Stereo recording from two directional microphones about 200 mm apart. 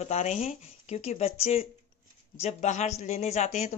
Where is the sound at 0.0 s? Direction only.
35° left (ahead or behind).